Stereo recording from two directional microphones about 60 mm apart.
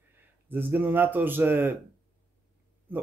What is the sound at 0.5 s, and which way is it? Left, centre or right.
Speech, right.